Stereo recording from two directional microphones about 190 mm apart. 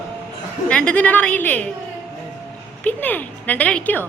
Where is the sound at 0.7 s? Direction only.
5° left (ahead or behind).